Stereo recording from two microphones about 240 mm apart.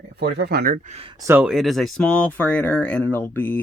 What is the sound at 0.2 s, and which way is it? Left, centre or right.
Speech, right.